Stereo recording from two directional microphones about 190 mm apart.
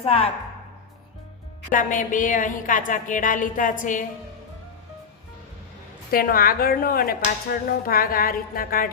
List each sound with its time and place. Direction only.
0.0 s a woman's voice: 30° left (ahead or behind)
1.7 s a woman's voice: 45° left (ahead or behind)
6.1 s a woman's voice: 50° left (ahead or behind)